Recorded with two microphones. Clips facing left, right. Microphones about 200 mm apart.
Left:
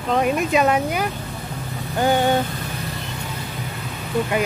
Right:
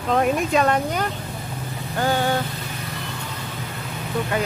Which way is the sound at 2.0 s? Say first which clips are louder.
Left 3 dB; 20° left (ahead or behind).